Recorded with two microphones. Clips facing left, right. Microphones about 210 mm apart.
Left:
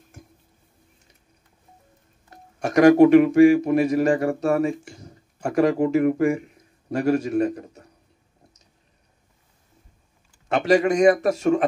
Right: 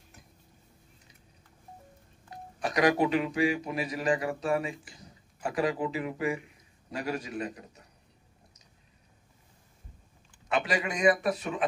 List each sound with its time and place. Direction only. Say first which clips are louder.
2.6 s speech: left 12 dB; 50° left (ahead or behind)
10.5 s speech: left 11 dB; 45° left (ahead or behind)